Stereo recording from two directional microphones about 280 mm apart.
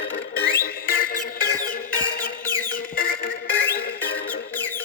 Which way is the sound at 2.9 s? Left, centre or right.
Left.